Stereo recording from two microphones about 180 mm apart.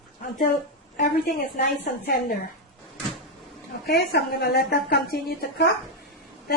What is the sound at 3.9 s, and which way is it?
A woman's voice, 65° left (ahead or behind).